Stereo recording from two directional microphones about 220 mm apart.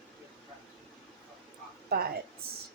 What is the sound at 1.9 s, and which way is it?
Speech, 45° right (ahead or behind).